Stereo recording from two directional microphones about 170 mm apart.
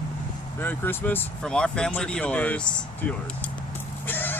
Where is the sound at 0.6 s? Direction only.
10° left (ahead or behind).